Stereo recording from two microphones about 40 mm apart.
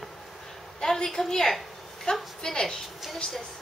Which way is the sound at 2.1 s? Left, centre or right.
Left.